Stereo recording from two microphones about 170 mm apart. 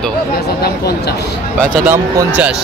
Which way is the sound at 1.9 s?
10° right (ahead or behind).